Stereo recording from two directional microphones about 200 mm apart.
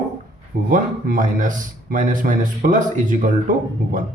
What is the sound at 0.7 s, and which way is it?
Speech, 45° right (ahead or behind).